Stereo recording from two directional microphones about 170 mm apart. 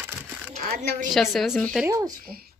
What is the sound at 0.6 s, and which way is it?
Speech, 65° right (ahead or behind).